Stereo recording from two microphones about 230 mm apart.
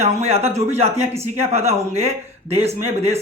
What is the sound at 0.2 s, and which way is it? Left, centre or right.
Speech, right.